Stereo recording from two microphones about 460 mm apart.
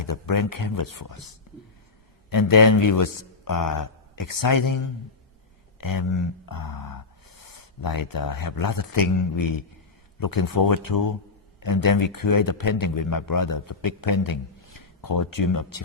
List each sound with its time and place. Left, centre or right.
0.0 s speech: left
2.3 s speech: left
5.8 s speech: left